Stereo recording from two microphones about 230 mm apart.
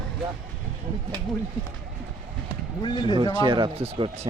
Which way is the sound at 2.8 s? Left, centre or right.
Centre.